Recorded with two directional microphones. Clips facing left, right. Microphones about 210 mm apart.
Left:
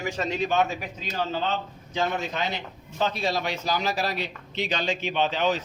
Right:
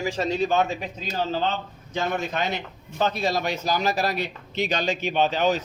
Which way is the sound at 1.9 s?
50° right (ahead or behind).